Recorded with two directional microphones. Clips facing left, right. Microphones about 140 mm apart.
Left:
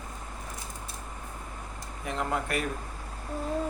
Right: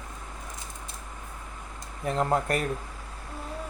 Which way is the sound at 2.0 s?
35° right (ahead or behind).